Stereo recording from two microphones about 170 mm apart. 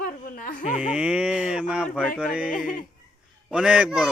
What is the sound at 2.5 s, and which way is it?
Speech, 50° left (ahead or behind).